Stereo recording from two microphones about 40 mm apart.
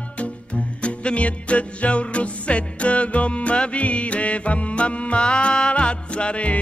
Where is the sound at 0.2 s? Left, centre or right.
Left.